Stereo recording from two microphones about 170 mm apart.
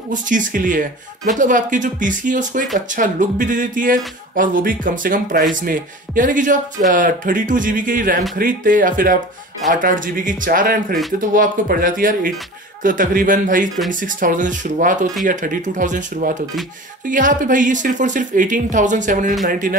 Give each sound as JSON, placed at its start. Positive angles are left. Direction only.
{"t": 0.1, "sound": "speech", "side_deg": -50}